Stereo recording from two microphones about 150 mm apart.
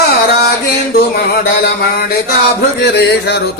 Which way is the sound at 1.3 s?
90° left.